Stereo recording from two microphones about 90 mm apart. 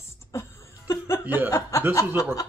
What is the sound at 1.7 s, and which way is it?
Speech, 35° left (ahead or behind).